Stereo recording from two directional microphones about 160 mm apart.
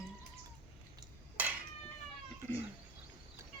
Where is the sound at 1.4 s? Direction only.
10° right (ahead or behind).